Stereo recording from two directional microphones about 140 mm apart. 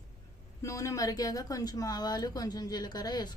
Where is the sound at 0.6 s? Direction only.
20° left (ahead or behind).